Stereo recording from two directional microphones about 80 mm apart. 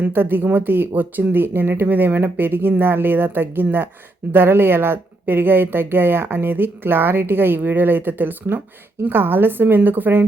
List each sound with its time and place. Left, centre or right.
0.0 s speech: right